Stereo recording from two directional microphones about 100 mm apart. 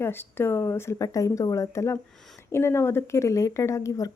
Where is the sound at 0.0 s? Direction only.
20° left (ahead or behind).